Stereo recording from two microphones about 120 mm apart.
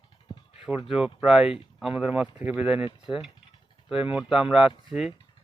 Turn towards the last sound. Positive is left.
turn(degrees=-5)  # may be behind; listen again after turning